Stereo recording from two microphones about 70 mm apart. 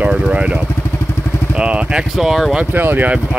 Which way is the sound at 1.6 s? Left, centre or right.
Centre.